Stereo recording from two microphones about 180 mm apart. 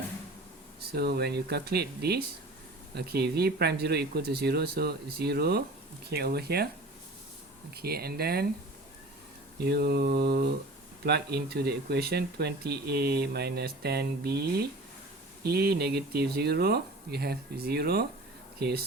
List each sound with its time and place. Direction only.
0.8 s speech: 60° right (ahead or behind)
7.8 s speech: 60° right (ahead or behind)
9.6 s speech: 60° right (ahead or behind)